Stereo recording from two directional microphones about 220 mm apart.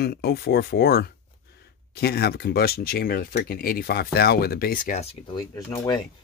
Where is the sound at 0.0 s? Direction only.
45° left (ahead or behind).